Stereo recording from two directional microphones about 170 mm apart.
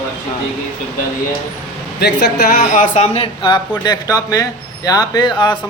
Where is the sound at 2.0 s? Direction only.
70° left (ahead or behind); by 3.0 s 50° left (ahead or behind).